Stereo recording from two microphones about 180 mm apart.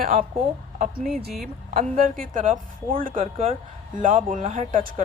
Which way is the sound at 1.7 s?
50° right (ahead or behind).